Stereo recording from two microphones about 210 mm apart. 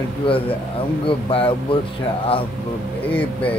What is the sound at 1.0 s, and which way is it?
Speech, 25° left (ahead or behind).